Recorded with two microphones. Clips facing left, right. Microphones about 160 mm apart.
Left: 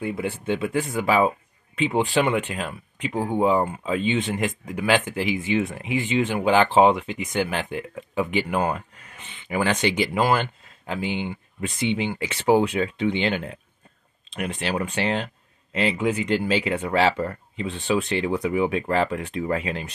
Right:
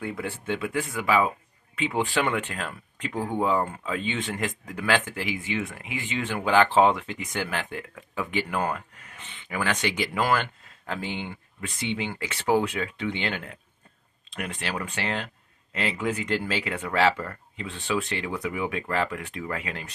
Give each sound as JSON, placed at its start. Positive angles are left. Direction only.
{"t": 0.0, "sound": "speech", "side_deg": 20}